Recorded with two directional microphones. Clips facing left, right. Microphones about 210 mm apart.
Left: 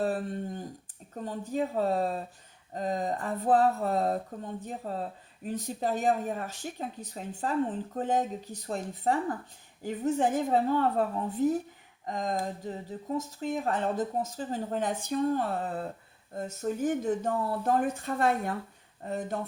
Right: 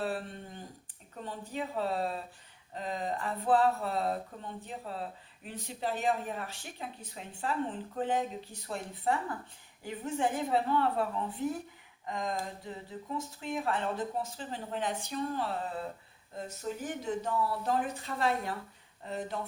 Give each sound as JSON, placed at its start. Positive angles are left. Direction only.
{"t": 0.0, "sound": "speech", "side_deg": 45}